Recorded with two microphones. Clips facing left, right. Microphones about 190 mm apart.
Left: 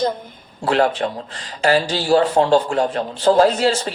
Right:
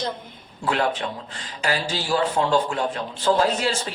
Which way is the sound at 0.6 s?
40° left (ahead or behind).